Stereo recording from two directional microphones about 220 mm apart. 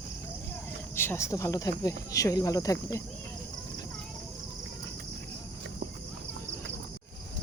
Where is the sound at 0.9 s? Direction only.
10° left (ahead or behind).